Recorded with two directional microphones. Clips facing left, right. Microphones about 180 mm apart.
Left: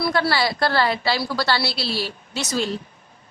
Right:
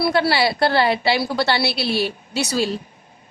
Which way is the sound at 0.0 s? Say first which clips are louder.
Right 3 dB; 25° right (ahead or behind).